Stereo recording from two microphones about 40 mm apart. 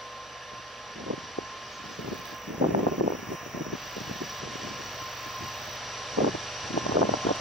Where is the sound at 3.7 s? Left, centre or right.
Centre.